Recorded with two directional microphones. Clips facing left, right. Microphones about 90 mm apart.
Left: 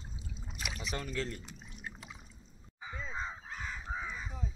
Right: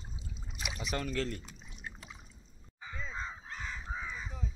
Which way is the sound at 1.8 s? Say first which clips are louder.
Even; 5° left (ahead or behind).